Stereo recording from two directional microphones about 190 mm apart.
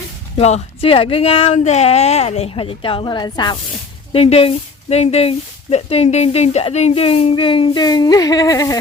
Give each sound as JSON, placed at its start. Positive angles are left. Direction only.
{"t": 0.3, "sound": "speech", "side_deg": 35}